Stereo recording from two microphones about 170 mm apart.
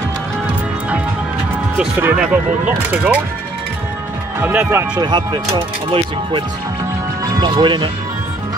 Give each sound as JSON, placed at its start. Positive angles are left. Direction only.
{"t": 1.8, "sound": "speech", "side_deg": -10}
{"t": 4.4, "sound": "speech", "side_deg": -10}
{"t": 5.0, "sound": "speech", "side_deg": -25}